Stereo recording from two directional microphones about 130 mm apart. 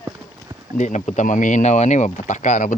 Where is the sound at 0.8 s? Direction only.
65° left (ahead or behind).